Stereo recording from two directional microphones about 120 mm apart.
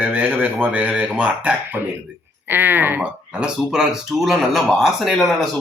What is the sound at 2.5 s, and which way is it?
Speech, 15° right (ahead or behind).